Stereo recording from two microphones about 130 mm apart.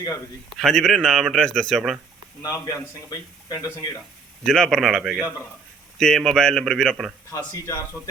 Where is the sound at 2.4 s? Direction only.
25° left (ahead or behind).